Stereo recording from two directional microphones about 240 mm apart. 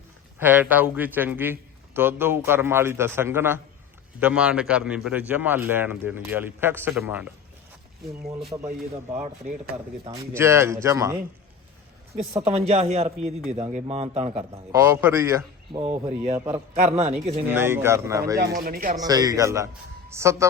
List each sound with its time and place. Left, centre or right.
0.3 s a man's voice: centre
8.5 s speech: centre
10.1 s a man's voice: centre
12.1 s speech: right
14.5 s a man's voice: centre
15.8 s speech: right
17.5 s a man's voice: centre
18.3 s speech: right
19.0 s a man's voice: centre